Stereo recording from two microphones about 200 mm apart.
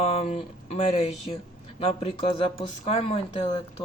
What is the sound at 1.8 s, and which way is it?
Speech, 30° left (ahead or behind).